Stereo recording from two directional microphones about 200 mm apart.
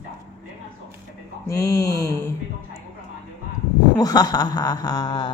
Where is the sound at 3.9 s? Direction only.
20° left (ahead or behind).